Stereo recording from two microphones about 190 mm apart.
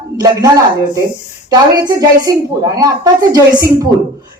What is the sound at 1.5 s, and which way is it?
A woman's voice, 20° right (ahead or behind).